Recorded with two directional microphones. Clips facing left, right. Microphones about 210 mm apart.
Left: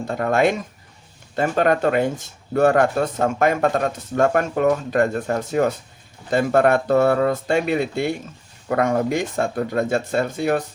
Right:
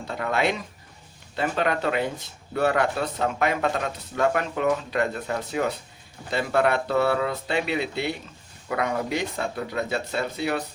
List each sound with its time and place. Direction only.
0.1 s speech: 45° left (ahead or behind)